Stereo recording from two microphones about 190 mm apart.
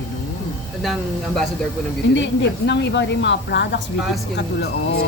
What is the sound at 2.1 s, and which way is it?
Speech, 70° left (ahead or behind).